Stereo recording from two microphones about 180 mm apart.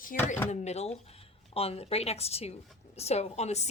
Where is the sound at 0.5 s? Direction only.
40° left (ahead or behind).